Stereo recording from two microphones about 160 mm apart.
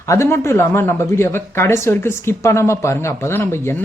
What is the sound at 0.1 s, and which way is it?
Speech, 20° left (ahead or behind).